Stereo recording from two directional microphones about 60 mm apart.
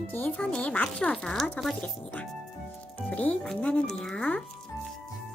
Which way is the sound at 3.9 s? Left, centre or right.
Centre.